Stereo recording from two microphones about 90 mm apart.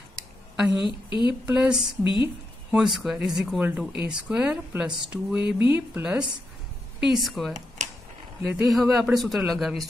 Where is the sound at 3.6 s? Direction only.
15° right (ahead or behind).